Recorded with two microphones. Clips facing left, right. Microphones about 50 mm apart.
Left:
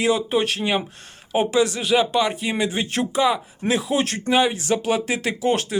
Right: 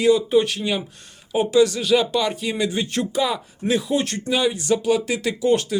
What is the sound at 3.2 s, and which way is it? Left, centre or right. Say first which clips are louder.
Speech: left 3 dB; centre.